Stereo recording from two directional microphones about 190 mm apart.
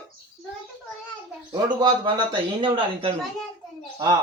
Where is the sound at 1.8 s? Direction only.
25° right (ahead or behind).